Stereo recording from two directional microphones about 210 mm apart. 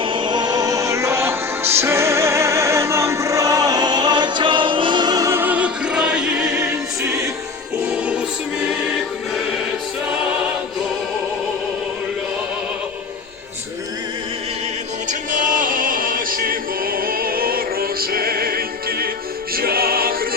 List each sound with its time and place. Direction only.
0.0 s music: 25° right (ahead or behind); by 8.2 s 5° right (ahead or behind)
8.6 s choir: 5° right (ahead or behind)
15.3 s music: 40° right (ahead or behind)